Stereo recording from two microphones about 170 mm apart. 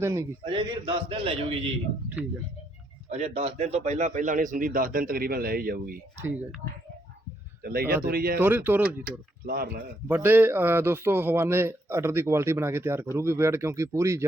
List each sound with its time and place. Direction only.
0.0 s a man's voice: 15° right (ahead or behind)
0.4 s a man's voice: 30° right (ahead or behind)
3.1 s a man's voice: 40° right (ahead or behind); by 6.0 s 60° right (ahead or behind)
7.6 s speech: 60° right (ahead or behind)
8.4 s a man's voice: 10° right (ahead or behind)
9.0 s speech: 60° right (ahead or behind)
10.1 s a man's voice: 10° right (ahead or behind)